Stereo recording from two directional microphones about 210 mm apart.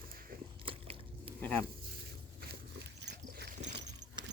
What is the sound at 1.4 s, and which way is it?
Speech, 10° left (ahead or behind).